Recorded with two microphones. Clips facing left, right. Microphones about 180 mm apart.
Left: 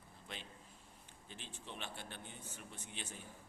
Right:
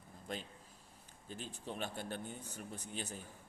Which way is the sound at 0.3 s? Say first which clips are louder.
Right 7 dB; 40° right (ahead or behind).